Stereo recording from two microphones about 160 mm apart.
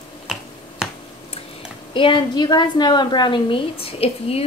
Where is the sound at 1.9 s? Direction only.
30° left (ahead or behind).